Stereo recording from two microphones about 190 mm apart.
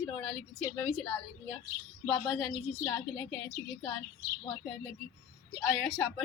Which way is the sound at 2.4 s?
20° left (ahead or behind).